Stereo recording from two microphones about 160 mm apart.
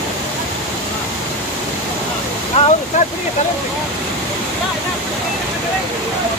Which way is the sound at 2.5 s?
45° left (ahead or behind).